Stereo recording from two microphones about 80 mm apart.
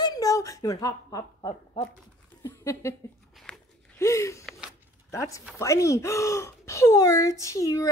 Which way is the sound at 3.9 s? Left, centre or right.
Left.